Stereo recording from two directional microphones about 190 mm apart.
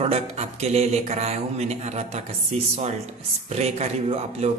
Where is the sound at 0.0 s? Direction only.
30° right (ahead or behind).